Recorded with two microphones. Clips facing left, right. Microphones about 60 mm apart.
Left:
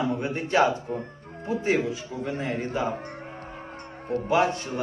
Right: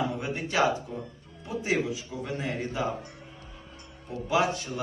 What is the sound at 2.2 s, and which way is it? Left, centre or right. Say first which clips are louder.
Speech: left 4 dB; centre.